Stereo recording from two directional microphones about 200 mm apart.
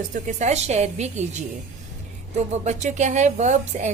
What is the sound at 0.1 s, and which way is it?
Speech, 35° right (ahead or behind).